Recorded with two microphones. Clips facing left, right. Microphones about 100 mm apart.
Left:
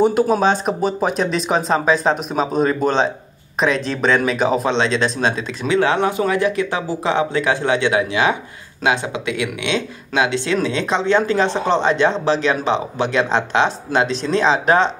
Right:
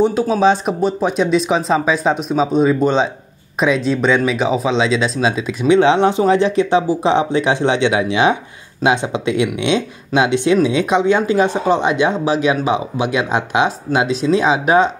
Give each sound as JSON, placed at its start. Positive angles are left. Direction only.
{"t": 0.0, "sound": "speech", "side_deg": 5}
{"t": 5.7, "sound": "speech", "side_deg": -20}